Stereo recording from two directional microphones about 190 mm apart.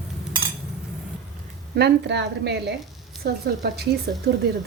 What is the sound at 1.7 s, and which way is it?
A woman's voice, 60° right (ahead or behind).